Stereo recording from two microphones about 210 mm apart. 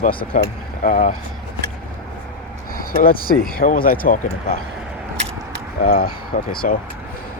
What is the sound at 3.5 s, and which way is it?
Speech, 40° left (ahead or behind).